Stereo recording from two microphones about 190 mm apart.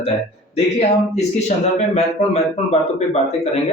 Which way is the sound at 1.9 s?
35° left (ahead or behind).